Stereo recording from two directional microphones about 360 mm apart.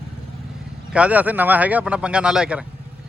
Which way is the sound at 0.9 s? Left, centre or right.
Centre.